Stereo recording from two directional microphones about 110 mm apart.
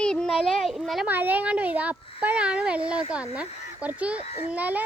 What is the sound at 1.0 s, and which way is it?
Speech, 15° right (ahead or behind).